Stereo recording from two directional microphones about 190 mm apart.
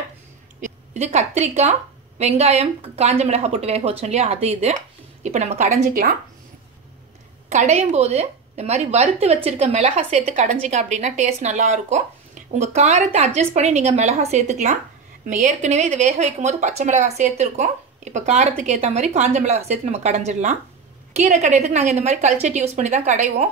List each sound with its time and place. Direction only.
0.6 s a woman's voice: 35° right (ahead or behind)
7.4 s a woman's voice: 35° right (ahead or behind)